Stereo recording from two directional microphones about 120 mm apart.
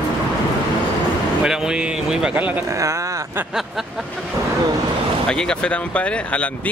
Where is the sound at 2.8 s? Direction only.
25° right (ahead or behind).